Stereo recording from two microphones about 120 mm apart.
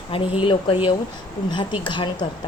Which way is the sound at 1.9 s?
40° left (ahead or behind).